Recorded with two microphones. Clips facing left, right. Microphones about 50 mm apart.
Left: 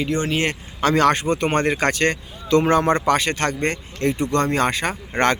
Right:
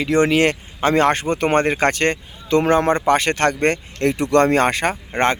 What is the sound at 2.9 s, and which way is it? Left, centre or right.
Speech, right.